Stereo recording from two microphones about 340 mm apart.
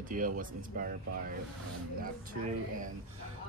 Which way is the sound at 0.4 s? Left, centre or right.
Right.